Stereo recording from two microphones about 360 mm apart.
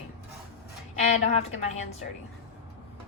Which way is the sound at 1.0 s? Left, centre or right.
Centre.